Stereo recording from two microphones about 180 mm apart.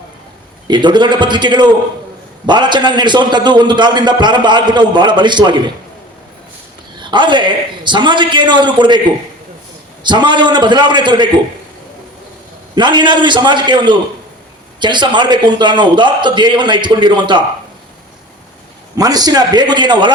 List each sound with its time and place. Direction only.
0.7 s a man's voice: 25° right (ahead or behind)
7.0 s a man's voice: 25° right (ahead or behind)
10.0 s a man's voice: 25° right (ahead or behind)
12.7 s a man's voice: 25° right (ahead or behind)
18.9 s a man's voice: 20° right (ahead or behind)